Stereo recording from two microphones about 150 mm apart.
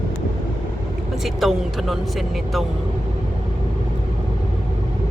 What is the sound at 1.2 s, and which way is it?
Speech, centre (ahead or behind).